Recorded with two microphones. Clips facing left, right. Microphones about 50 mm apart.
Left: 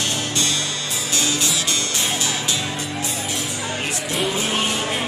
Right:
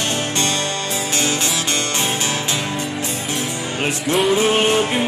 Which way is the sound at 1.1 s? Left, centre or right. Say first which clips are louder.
Right 1 dB; right.